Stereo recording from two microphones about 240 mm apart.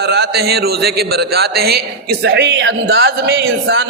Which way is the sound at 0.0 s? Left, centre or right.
Right.